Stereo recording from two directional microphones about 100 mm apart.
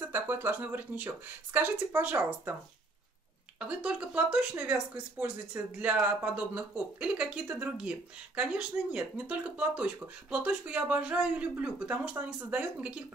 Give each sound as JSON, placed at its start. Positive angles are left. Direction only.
{"t": 0.0, "sound": "speech", "side_deg": -20}
{"t": 3.5, "sound": "speech", "side_deg": -10}